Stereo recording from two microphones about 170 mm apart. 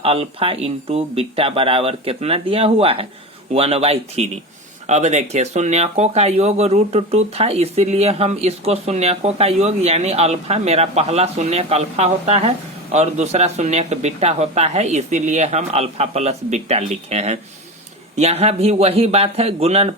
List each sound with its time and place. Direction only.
0.0 s speech: 35° right (ahead or behind)